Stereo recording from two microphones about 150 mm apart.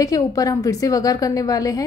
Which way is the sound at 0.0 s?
25° left (ahead or behind).